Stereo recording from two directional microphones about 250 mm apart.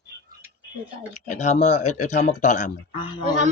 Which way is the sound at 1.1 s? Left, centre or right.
Left.